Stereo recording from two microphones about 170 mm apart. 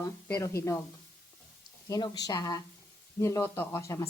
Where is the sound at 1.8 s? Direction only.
20° left (ahead or behind).